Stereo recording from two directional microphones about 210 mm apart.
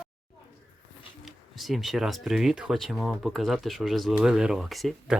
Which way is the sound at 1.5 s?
Centre (ahead or behind).